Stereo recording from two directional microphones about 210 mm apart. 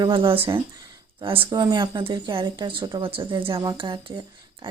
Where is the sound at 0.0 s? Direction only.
25° right (ahead or behind).